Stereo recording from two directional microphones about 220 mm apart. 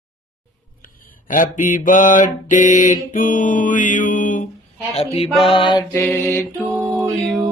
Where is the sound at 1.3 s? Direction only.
35° left (ahead or behind).